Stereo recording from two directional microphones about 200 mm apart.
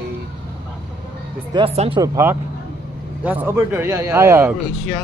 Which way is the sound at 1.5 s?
25° right (ahead or behind).